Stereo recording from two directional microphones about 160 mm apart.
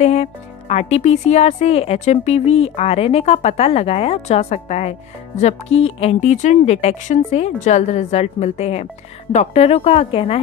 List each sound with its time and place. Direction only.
0.0 s speech: 45° left (ahead or behind)